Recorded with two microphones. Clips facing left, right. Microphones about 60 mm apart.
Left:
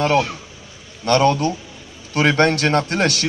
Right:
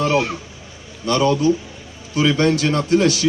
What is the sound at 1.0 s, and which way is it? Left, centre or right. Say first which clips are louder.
A man's voice: even; left.